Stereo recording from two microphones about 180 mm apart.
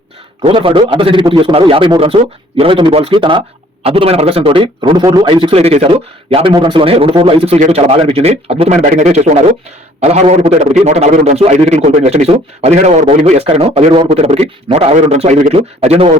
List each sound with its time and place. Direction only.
0.4 s a man's voice: 30° right (ahead or behind)